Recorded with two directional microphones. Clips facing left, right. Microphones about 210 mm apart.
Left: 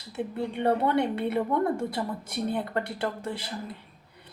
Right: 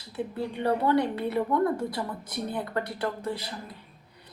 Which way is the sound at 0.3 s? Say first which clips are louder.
Left 2 dB; 25° left (ahead or behind).